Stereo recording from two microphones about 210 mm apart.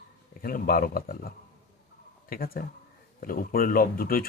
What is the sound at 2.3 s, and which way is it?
Speech, 45° left (ahead or behind).